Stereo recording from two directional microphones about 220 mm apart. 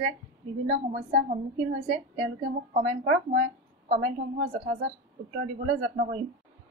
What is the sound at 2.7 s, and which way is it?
A woman's voice, 35° right (ahead or behind).